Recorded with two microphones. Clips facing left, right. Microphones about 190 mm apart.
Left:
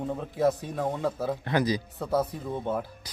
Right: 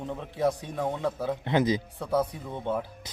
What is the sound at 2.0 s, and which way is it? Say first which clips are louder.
Speech: even; 10° left (ahead or behind).